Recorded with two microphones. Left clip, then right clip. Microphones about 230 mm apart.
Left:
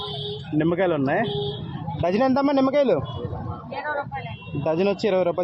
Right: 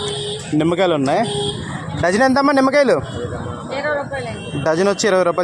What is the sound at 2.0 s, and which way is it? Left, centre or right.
A man's voice, right.